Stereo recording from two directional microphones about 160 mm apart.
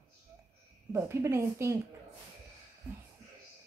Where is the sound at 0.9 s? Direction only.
15° right (ahead or behind).